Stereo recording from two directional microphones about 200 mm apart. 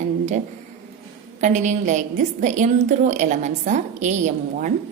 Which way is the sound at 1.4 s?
40° right (ahead or behind).